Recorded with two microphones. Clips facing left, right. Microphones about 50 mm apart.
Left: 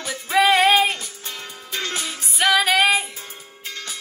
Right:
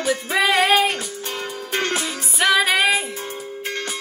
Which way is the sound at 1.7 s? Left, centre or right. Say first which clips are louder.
Right 5 dB; right.